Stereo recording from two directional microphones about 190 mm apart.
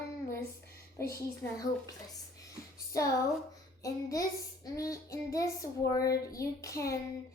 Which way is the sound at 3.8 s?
15° left (ahead or behind).